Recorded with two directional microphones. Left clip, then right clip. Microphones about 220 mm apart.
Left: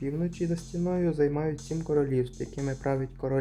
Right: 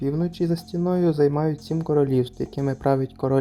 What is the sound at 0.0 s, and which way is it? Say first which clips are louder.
Speech: right 7 dB; 25° right (ahead or behind).